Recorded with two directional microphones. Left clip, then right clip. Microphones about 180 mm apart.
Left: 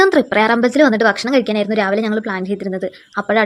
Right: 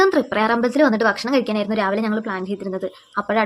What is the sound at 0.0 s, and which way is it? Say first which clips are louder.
A woman's voice: left 4 dB; 25° left (ahead or behind).